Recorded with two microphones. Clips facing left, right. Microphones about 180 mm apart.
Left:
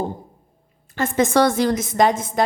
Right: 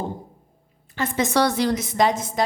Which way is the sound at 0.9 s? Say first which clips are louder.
Left 4 dB; 50° left (ahead or behind).